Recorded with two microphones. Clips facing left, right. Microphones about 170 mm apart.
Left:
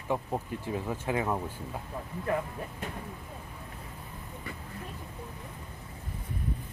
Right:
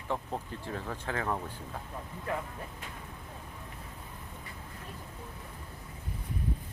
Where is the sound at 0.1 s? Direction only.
15° left (ahead or behind).